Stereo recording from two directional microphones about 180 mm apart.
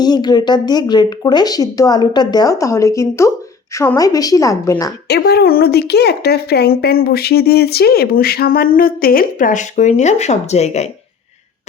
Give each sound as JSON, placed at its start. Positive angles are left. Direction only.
{"t": 0.0, "sound": "speech", "side_deg": 25}
{"t": 5.0, "sound": "speech", "side_deg": 65}